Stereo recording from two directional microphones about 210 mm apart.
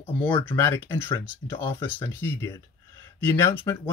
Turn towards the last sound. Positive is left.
turn(degrees=10)  # may be behind; listen again after turning